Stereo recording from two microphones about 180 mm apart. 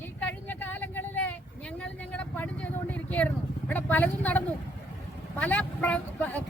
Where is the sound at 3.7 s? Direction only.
10° left (ahead or behind).